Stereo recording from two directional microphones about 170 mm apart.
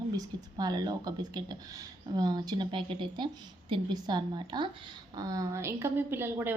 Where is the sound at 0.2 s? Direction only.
25° right (ahead or behind).